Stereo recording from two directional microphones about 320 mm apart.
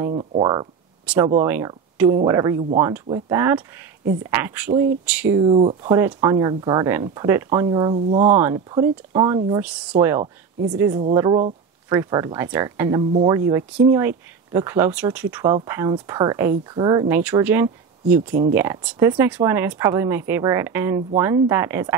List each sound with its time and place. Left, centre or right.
0.0 s speech: centre
4.0 s speech: right
4.3 s speech: centre